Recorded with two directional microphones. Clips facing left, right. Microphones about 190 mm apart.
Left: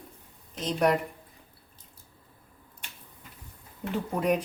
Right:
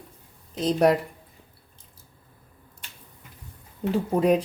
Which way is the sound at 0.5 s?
35° right (ahead or behind).